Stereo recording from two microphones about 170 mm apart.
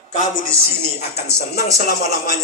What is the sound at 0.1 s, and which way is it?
Speech, 50° left (ahead or behind).